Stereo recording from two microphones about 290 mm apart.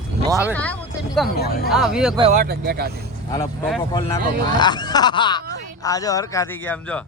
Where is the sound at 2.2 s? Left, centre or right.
Right.